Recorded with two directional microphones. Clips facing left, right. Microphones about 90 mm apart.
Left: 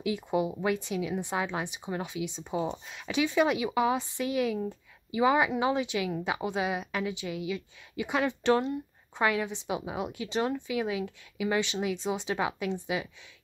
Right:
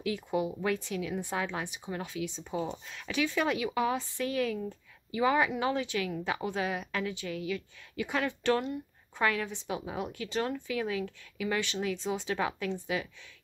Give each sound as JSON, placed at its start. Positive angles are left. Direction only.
{"t": 0.0, "sound": "speech", "side_deg": 20}